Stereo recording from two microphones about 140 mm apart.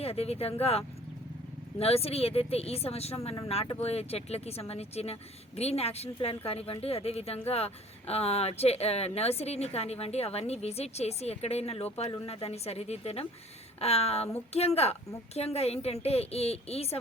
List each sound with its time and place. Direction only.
0.0 s speech: 45° left (ahead or behind)